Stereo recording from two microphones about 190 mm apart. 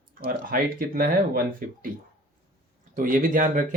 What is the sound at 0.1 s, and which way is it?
Speech, 50° right (ahead or behind).